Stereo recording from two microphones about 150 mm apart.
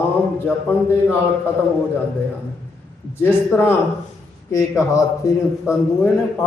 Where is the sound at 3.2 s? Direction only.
15° left (ahead or behind).